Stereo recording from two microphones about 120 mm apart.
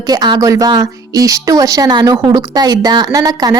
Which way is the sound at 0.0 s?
35° right (ahead or behind).